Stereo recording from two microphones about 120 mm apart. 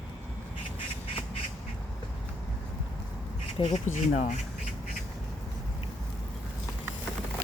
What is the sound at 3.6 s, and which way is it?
Speech, 80° left.